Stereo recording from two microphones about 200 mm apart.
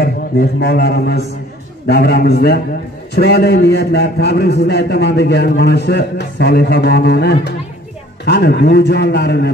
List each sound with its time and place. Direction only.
0.0 s a man's voice: 50° left (ahead or behind)